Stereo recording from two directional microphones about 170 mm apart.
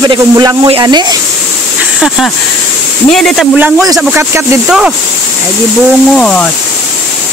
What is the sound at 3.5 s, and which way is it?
Speech, 10° right (ahead or behind).